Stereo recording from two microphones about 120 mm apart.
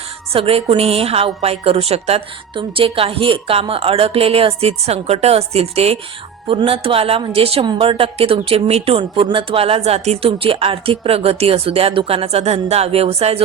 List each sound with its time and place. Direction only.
0.3 s a woman's voice: 50° right (ahead or behind)